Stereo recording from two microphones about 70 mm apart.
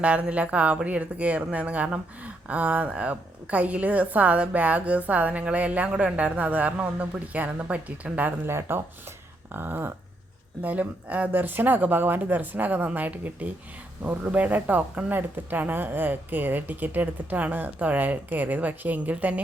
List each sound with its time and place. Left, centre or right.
0.0 s speech: centre
8.4 s a sound: right
10.6 s speech: right